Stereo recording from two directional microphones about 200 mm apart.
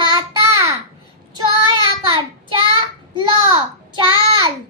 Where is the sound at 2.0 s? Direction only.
25° right (ahead or behind).